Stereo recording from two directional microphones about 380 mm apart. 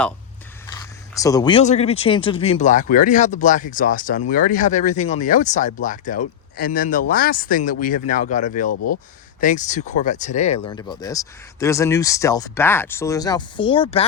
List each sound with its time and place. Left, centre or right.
1.1 s speech: centre
8.7 s speech: left
9.4 s speech: centre